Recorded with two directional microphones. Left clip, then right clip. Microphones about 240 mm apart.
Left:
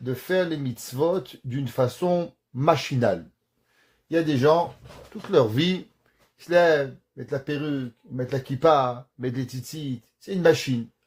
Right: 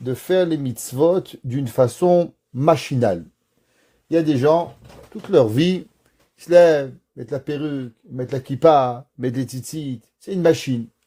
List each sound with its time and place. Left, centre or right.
0.0 s speech: right